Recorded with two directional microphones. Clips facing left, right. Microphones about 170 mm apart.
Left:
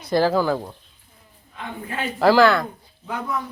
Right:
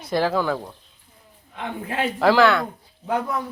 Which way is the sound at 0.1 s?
Centre (ahead or behind).